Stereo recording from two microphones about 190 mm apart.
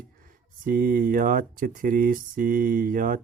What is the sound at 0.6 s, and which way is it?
Speech, 50° right (ahead or behind).